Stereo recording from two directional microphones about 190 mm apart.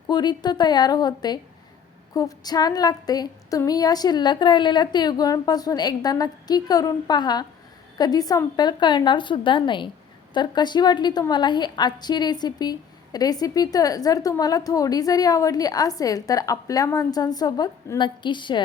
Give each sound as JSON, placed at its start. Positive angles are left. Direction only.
{"t": 0.1, "sound": "a woman's voice", "side_deg": 20}